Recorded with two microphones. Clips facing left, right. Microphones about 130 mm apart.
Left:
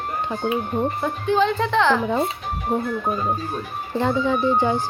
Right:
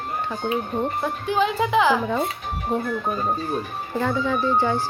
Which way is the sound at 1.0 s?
5° right (ahead or behind).